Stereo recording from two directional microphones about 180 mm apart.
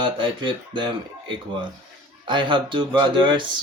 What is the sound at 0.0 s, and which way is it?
Speech, 25° right (ahead or behind).